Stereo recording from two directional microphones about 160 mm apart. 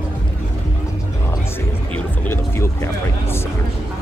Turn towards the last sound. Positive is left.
turn(degrees=15)  # may be behind; listen again after turning